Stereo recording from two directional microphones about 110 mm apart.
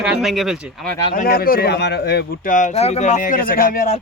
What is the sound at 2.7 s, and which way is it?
Speech, 75° left (ahead or behind).